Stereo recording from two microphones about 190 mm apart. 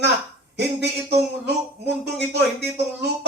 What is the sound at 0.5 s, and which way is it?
A man's voice, 60° right (ahead or behind).